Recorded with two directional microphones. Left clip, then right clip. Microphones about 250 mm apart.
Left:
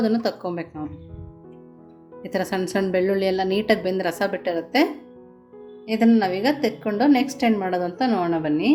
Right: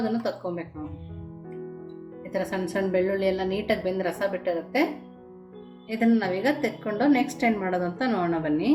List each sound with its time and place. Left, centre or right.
0.0 s a woman's voice: left
2.3 s a woman's voice: left
5.9 s a woman's voice: left